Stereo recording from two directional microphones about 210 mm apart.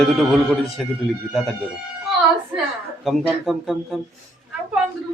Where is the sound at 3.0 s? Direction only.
Centre (ahead or behind).